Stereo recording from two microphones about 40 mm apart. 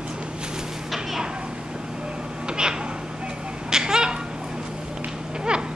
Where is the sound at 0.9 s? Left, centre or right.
Centre.